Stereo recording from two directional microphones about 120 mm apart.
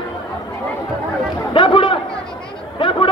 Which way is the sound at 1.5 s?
45° left (ahead or behind).